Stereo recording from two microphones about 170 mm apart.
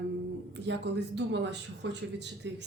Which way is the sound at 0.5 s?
90° right.